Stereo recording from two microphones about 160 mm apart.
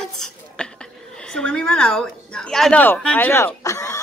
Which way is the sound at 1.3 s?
5° left (ahead or behind).